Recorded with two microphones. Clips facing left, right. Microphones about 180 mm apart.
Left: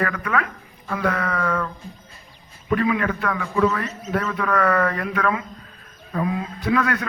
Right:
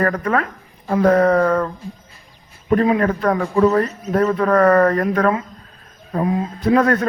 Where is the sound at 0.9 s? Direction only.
40° right (ahead or behind).